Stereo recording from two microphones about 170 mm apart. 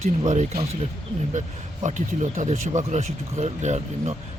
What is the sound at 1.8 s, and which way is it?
Speech, 45° right (ahead or behind).